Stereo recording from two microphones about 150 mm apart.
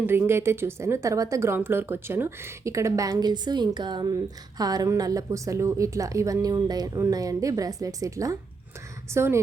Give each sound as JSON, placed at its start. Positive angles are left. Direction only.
{"t": 0.0, "sound": "a woman's voice", "side_deg": -15}